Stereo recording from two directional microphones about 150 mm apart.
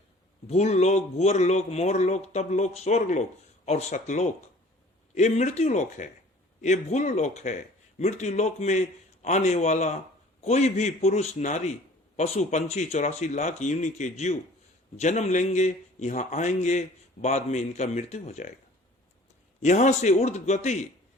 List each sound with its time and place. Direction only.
0.4 s a man's voice: 50° left (ahead or behind)
19.6 s a man's voice: 50° left (ahead or behind)